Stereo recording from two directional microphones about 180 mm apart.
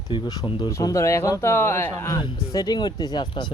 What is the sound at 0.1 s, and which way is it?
Speech, 25° left (ahead or behind).